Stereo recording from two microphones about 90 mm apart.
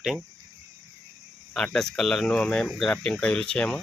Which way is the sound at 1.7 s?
5° left (ahead or behind).